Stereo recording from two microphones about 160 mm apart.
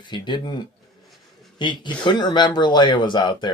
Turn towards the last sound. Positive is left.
turn(degrees=30)  # may be behind; listen again after turning